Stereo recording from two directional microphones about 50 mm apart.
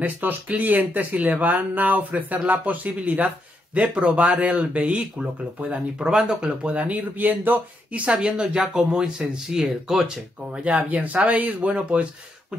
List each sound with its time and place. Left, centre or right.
0.0 s speech: right
8.1 s speech: centre